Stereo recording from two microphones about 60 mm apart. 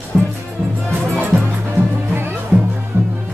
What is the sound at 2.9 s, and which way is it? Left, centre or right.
Music, right.